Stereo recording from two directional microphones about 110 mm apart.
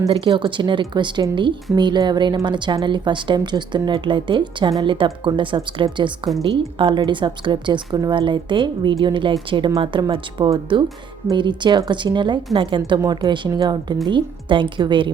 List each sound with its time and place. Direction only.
0.1 s a woman's voice: 50° right (ahead or behind)